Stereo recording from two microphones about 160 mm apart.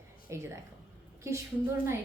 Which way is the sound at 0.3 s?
15° right (ahead or behind).